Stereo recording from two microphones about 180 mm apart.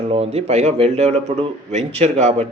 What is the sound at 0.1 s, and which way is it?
A man's voice, 35° right (ahead or behind).